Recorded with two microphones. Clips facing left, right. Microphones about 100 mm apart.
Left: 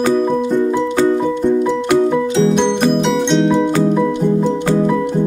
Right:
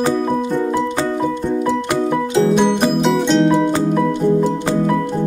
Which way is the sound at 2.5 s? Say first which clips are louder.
Left 1 dB; 5° right (ahead or behind).